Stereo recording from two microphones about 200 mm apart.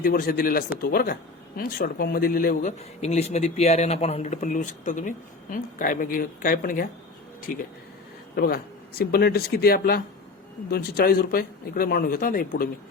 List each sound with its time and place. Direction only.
0.0 s speech: 45° left (ahead or behind)